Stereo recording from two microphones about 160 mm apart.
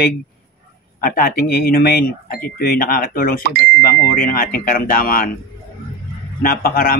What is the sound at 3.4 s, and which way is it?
Speech, 75° right (ahead or behind).